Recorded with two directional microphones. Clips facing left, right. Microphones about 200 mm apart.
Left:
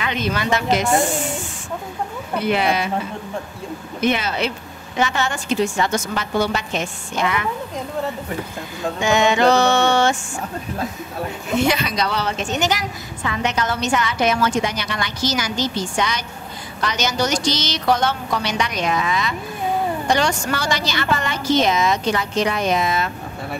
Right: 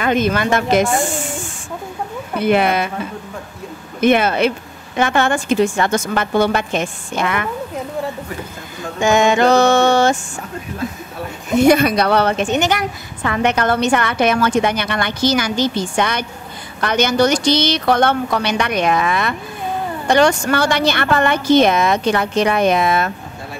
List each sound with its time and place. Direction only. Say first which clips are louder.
0.0 s mantra: right 6 dB; 50° right (ahead or behind)
2.4 s mantra: right 5 dB; 55° right (ahead or behind)
4.0 s a woman's voice: right 7 dB; 55° right (ahead or behind)
9.0 s mantra: right 3 dB; 50° right (ahead or behind)
11.6 s a woman's voice: right 10 dB; 50° right (ahead or behind)